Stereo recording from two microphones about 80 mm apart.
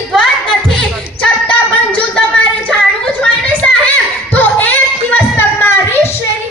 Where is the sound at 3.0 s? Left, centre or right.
Centre.